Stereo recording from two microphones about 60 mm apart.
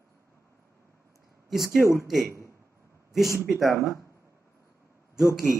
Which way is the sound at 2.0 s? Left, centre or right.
Centre.